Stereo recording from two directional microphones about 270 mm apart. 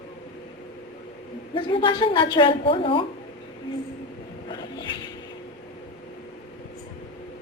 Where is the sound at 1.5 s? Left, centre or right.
Centre.